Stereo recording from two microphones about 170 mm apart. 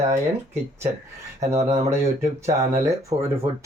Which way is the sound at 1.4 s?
15° right (ahead or behind).